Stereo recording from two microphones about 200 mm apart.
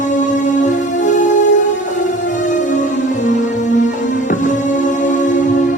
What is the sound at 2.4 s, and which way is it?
Music, 40° left (ahead or behind).